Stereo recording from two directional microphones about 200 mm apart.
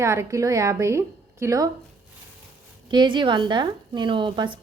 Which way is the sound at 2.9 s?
25° right (ahead or behind).